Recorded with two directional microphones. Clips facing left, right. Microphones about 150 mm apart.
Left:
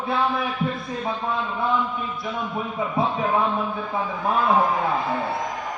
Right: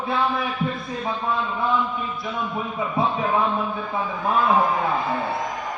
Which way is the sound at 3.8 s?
20° left (ahead or behind).